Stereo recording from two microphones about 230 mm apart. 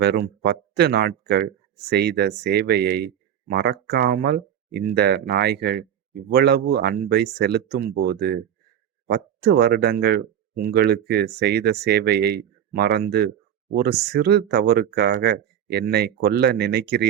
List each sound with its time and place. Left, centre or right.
0.0 s speech: right